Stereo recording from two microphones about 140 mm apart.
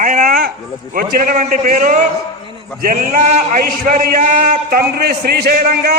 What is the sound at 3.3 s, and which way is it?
A man's voice, 70° right (ahead or behind).